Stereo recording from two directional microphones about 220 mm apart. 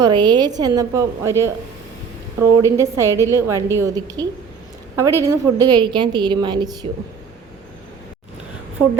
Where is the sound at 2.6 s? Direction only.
15° right (ahead or behind).